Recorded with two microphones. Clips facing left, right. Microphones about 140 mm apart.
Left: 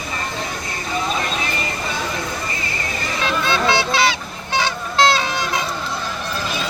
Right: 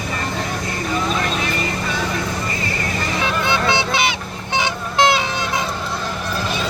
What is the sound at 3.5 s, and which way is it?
Music, 20° right (ahead or behind).